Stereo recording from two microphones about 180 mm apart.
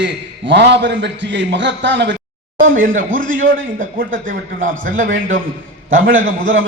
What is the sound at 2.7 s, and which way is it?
Speech, 50° right (ahead or behind).